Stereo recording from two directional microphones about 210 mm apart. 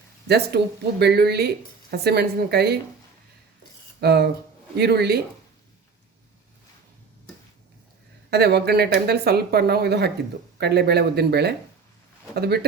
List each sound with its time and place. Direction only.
0.3 s speech: 50° right (ahead or behind)
4.0 s speech: 50° right (ahead or behind)
8.3 s speech: 50° right (ahead or behind)